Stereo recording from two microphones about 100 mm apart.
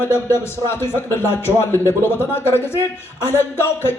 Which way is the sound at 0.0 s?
25° left (ahead or behind).